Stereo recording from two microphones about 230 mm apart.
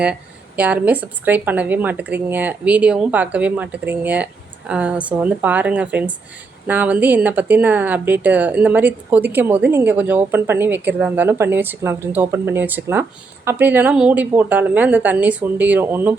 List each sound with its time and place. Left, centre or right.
0.0 s speech: centre